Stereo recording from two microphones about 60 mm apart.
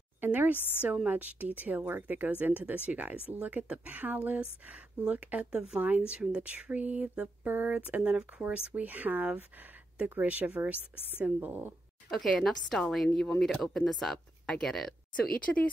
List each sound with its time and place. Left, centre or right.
0.2 s a woman's voice: right; by 5.8 s centre
5.8 s speech: right
12.1 s a woman's voice: centre
15.1 s speech: left